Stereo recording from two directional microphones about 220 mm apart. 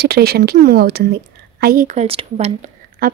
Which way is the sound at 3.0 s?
40° right (ahead or behind).